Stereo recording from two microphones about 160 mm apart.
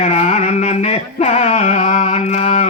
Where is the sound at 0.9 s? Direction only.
40° left (ahead or behind).